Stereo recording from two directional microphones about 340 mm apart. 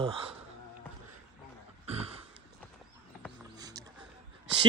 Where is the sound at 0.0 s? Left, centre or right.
Centre.